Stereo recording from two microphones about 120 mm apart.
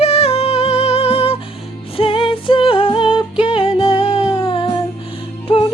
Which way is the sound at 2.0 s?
45° left (ahead or behind).